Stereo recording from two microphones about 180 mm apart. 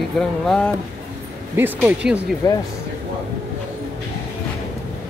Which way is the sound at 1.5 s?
10° right (ahead or behind).